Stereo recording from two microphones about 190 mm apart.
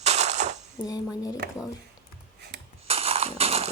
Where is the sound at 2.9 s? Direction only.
30° right (ahead or behind).